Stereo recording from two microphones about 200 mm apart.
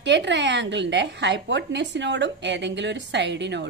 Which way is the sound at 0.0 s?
60° right (ahead or behind).